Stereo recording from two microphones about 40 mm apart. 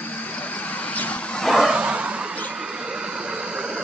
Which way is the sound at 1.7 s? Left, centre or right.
Right.